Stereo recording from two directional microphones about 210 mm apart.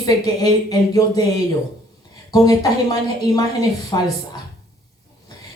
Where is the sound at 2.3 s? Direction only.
20° left (ahead or behind).